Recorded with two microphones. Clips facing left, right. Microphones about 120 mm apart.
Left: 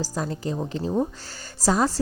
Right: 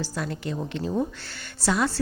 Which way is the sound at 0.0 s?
35° left (ahead or behind).